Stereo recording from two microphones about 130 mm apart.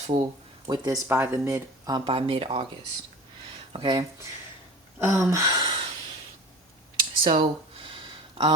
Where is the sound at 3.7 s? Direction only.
40° right (ahead or behind).